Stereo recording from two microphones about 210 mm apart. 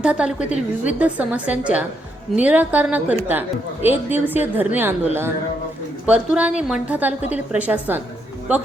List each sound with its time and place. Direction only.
0.0 s a woman's voice: 5° right (ahead or behind)
0.4 s a woman's voice: 35° left (ahead or behind)
0.9 s a woman's voice: 5° right (ahead or behind)
6.1 s a woman's voice: 5° right (ahead or behind)